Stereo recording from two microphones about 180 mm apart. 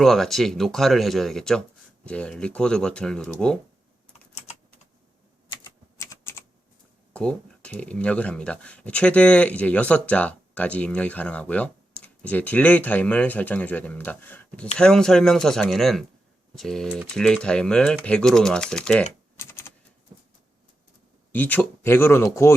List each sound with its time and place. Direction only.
0.0 s speech: centre (ahead or behind)
6.0 s typing: 15° left (ahead or behind)
7.1 s speech: 5° left (ahead or behind)
19.4 s typing: 15° left (ahead or behind)
21.3 s speech: 10° left (ahead or behind)